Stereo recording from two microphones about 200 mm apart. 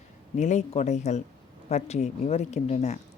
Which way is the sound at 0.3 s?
35° left (ahead or behind).